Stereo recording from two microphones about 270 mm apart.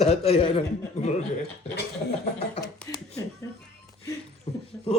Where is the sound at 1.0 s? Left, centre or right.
Left.